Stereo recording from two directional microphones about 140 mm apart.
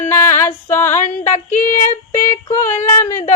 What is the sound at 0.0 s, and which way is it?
Music, 15° left (ahead or behind).